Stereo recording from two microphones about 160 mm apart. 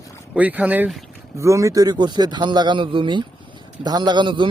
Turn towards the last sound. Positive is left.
turn(degrees=-30)  # may be behind; listen again after turning